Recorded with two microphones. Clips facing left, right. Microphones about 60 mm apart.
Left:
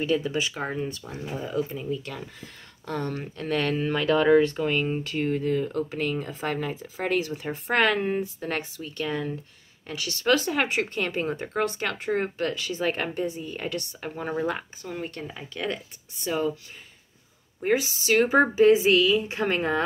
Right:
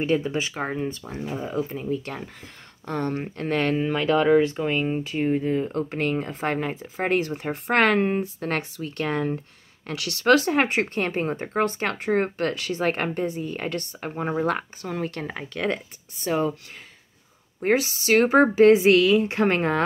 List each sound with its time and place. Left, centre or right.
0.0 s speech: right
1.9 s speech: right
3.7 s speech: centre
5.7 s speech: right
9.8 s speech: right
14.5 s speech: right
15.1 s speech: right
17.6 s speech: right